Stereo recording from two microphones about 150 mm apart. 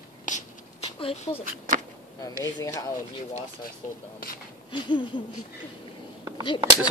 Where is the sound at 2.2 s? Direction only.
20° left (ahead or behind).